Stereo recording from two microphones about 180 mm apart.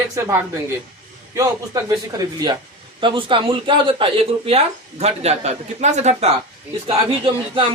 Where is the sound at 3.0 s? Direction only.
30° right (ahead or behind).